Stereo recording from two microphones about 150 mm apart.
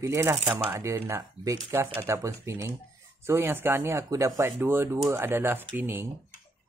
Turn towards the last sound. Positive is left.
turn(degrees=-15)  # may be behind; listen again after turning